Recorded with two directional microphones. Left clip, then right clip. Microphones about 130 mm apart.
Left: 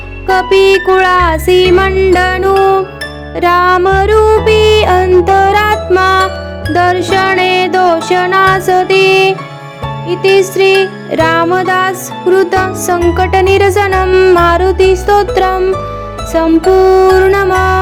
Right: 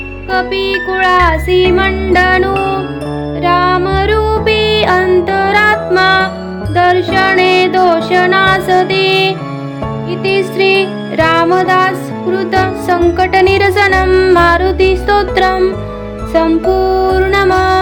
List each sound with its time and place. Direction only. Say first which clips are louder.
0.3 s music: left 7 dB; 60° left (ahead or behind)
3.4 s music: left 3 dB; 60° left (ahead or behind)
6.7 s music: even; 60° left (ahead or behind); by 15.7 s 35° left (ahead or behind)
16.3 s music: left 3 dB; 50° left (ahead or behind)